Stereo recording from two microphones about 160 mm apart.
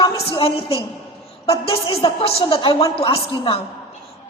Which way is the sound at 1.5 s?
35° left (ahead or behind).